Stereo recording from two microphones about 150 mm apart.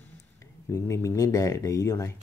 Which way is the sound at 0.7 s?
20° left (ahead or behind).